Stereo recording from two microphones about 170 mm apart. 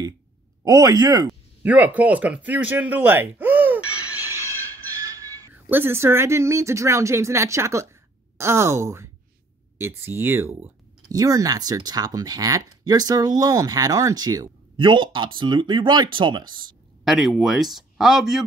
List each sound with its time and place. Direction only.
0.7 s speech: 20° right (ahead or behind)
1.6 s speech: 10° right (ahead or behind)
5.5 s speech: 10° right (ahead or behind)
17.0 s speech: centre (ahead or behind)